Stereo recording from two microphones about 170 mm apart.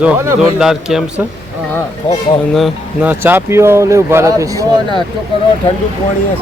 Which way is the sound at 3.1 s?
10° right (ahead or behind).